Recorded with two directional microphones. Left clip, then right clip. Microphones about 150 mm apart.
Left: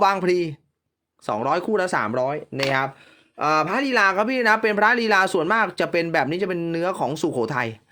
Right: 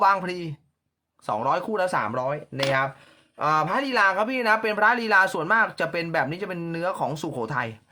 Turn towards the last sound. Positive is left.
turn(degrees=40)  # may be behind; listen again after turning